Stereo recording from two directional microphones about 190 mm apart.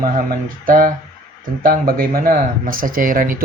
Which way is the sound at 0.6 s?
50° right (ahead or behind).